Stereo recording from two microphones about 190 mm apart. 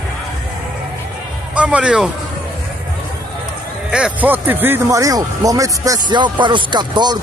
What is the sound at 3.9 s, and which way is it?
Speech, 5° right (ahead or behind).